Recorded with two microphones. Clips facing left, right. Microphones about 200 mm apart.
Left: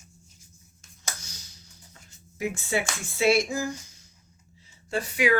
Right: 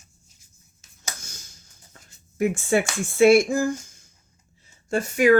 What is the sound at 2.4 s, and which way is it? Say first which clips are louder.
Speech: right 7 dB; 50° right (ahead or behind).